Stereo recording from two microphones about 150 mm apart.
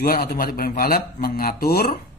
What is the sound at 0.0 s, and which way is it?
A man's voice, 85° left.